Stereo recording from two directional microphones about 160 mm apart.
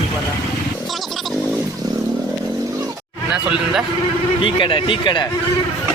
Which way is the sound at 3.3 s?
5° right (ahead or behind).